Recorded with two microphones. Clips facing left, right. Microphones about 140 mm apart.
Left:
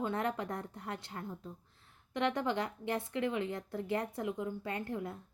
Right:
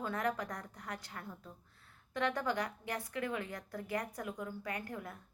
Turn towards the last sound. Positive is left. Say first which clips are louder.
# left 4 dB
turn(degrees=25)  # may be behind; listen again after turning